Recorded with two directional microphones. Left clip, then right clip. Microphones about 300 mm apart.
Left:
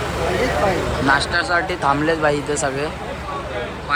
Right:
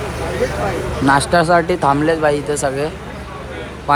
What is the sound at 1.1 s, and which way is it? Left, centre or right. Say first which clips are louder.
Speech: right 6 dB; centre.